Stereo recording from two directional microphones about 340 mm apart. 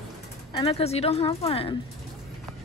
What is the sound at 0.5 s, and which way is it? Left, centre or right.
A woman's voice, centre.